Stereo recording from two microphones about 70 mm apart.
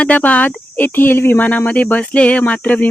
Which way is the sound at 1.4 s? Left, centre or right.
Left.